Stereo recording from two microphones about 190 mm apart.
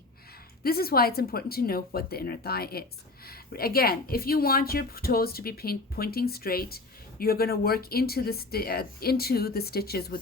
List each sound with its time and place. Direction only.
0.6 s speech: 55° left (ahead or behind)